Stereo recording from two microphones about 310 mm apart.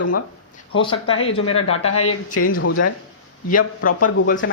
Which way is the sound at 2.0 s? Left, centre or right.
Left.